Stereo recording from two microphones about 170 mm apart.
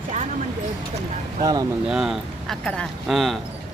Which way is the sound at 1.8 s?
5° right (ahead or behind).